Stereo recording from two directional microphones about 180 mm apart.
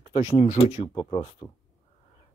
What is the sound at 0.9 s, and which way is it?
Speech, 25° left (ahead or behind).